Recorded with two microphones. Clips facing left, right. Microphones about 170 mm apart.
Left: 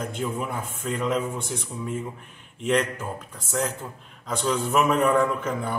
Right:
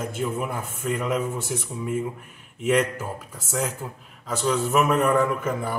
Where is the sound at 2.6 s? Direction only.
5° right (ahead or behind).